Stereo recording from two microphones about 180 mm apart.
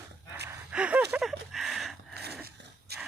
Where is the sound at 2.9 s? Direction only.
65° right (ahead or behind).